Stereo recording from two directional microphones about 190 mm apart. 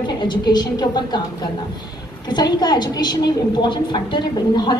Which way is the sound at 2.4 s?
20° left (ahead or behind).